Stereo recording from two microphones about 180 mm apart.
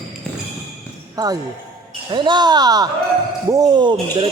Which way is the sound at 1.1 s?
20° right (ahead or behind).